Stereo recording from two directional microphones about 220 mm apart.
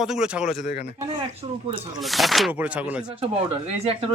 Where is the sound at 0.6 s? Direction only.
45° left (ahead or behind).